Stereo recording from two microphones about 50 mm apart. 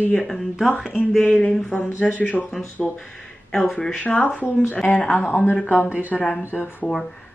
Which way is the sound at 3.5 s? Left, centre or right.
Centre.